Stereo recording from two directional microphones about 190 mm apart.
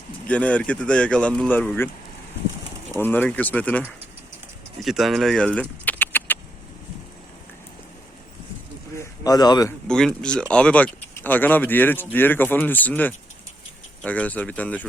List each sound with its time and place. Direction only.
0.3 s speech: 5° left (ahead or behind)
3.0 s speech: 10° left (ahead or behind)
9.0 s speech: 20° left (ahead or behind)
9.8 s speech: 5° left (ahead or behind)